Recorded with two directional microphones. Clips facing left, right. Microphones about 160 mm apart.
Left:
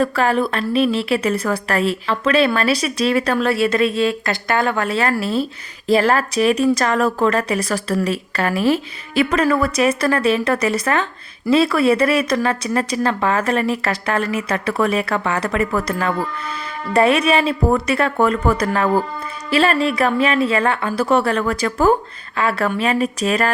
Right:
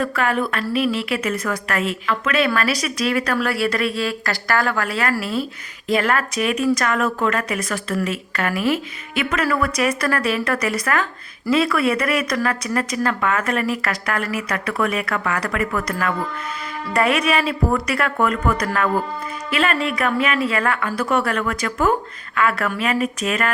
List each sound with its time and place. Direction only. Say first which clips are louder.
0.0 s a woman's voice: left 4 dB; 30° left (ahead or behind)